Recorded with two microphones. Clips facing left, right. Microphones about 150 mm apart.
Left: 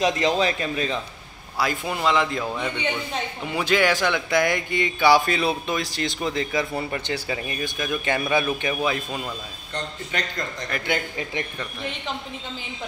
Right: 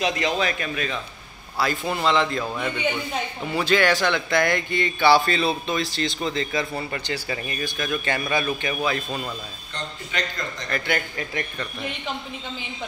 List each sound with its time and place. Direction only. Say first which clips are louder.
0.2 s speech: left 3 dB; 30° left (ahead or behind)
1.6 s speech: right 1 dB; 10° left (ahead or behind)
2.5 s a man's voice: right 1 dB; 5° right (ahead or behind)
3.4 s speech: right 1 dB; 15° left (ahead or behind)
10.9 s speech: left 3 dB; 20° left (ahead or behind)